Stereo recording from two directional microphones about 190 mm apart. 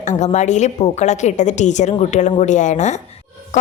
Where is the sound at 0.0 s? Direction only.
40° left (ahead or behind).